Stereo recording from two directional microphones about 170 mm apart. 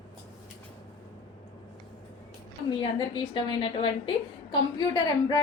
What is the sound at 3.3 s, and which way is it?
A woman's voice, 30° left (ahead or behind).